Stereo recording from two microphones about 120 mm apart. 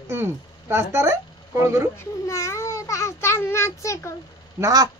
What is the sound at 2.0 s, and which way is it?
A child's voice, 25° left (ahead or behind).